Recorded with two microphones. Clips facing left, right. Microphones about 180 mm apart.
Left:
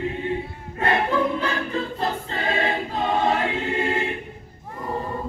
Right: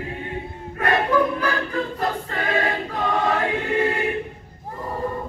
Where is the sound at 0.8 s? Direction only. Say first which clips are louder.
Right 2 dB; 25° left (ahead or behind).